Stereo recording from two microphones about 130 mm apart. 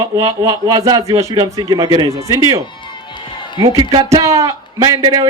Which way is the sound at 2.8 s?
35° left (ahead or behind).